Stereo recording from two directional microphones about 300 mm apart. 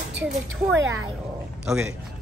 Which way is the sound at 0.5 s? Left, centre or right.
Right.